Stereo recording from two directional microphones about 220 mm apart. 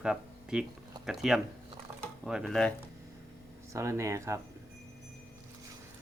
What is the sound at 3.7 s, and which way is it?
Speech, 10° right (ahead or behind).